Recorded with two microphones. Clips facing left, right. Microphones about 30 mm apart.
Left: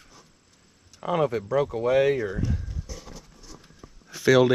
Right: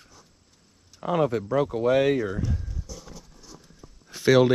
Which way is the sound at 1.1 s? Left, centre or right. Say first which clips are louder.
Right 1 dB; left.